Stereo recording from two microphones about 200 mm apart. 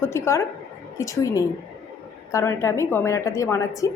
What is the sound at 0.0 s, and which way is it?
A woman's voice, 15° left (ahead or behind).